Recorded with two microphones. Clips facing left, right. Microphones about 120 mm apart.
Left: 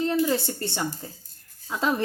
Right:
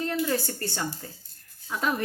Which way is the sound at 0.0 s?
20° left (ahead or behind).